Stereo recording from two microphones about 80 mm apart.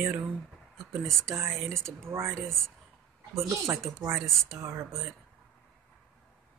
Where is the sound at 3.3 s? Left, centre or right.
Right.